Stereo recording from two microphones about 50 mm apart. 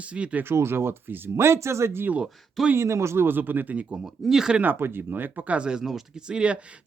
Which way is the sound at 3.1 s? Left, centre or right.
Right.